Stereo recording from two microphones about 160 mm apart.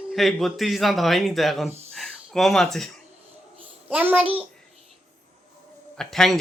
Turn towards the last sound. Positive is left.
turn(degrees=0)  # may be behind; listen again after turning